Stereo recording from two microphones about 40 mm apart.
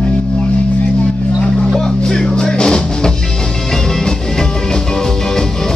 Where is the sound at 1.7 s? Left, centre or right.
Centre.